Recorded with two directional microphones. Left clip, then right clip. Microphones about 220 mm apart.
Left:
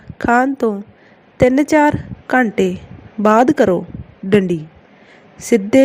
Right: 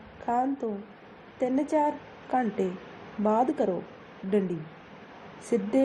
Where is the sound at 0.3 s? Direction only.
50° left (ahead or behind).